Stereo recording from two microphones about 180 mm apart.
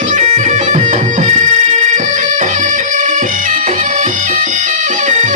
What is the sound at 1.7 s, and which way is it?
Music, 45° right (ahead or behind).